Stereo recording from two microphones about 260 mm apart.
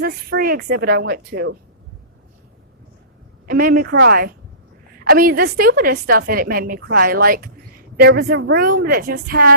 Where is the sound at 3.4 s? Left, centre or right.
Right.